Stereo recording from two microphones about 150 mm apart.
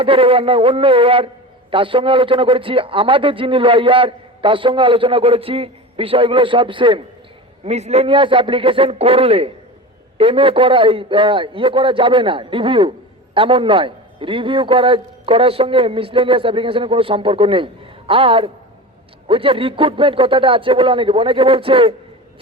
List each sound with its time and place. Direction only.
0.0 s a man's voice: 40° right (ahead or behind)
7.6 s a man's voice: 45° right (ahead or behind)